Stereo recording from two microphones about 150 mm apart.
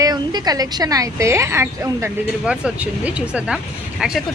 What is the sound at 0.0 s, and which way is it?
A woman's voice, 25° right (ahead or behind).